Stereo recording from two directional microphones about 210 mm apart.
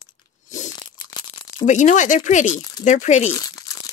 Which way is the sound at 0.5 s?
35° left (ahead or behind).